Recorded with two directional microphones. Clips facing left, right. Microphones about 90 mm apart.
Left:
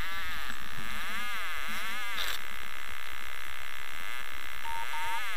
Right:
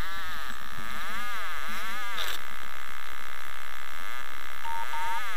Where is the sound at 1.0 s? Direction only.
30° right (ahead or behind).